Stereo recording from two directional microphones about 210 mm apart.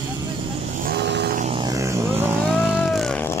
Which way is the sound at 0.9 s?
55° right (ahead or behind).